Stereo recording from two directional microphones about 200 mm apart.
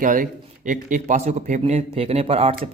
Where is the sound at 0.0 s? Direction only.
40° right (ahead or behind).